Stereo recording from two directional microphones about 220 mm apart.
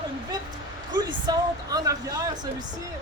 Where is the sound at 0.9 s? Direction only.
20° right (ahead or behind).